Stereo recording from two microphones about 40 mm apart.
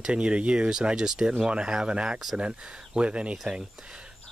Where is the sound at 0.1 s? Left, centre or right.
Right.